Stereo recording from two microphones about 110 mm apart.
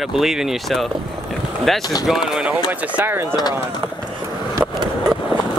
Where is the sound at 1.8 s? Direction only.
35° left (ahead or behind).